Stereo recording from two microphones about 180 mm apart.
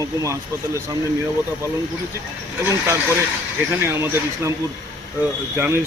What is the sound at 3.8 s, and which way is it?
Speech, 15° right (ahead or behind).